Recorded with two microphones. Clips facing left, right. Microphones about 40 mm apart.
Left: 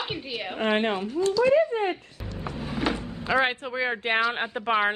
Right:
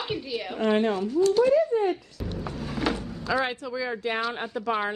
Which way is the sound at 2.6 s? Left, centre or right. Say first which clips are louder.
Left 1 dB; centre.